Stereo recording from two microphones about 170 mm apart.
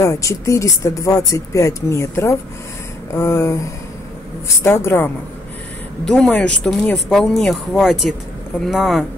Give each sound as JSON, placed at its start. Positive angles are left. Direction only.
{"t": 0.0, "sound": "speech", "side_deg": 20}
{"t": 4.6, "sound": "speech", "side_deg": 15}